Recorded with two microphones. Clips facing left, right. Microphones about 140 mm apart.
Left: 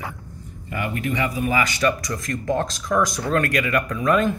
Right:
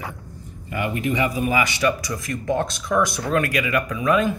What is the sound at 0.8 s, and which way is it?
Speech, 20° right (ahead or behind).